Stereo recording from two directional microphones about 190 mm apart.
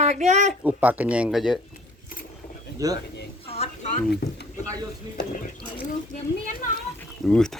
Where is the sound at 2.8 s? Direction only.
20° right (ahead or behind).